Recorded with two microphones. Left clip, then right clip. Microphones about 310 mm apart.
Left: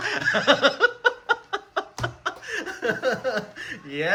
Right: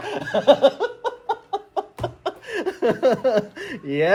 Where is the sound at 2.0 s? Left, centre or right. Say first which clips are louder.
Right 1 dB; centre.